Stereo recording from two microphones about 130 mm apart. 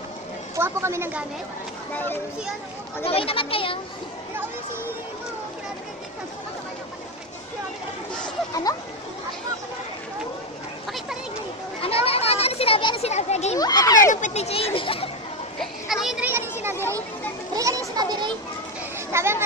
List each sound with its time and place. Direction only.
0.6 s a woman's voice: 20° right (ahead or behind)
3.1 s speech: 45° left (ahead or behind)
11.8 s a child's voice: 45° left (ahead or behind)
13.6 s speech: 30° left (ahead or behind)
14.1 s speech: 65° left (ahead or behind); by 15.0 s 45° left (ahead or behind)
15.6 s a sound: 5° right (ahead or behind)
16.3 s children playing: 20° right (ahead or behind)
19.1 s a woman's voice: 20° right (ahead or behind)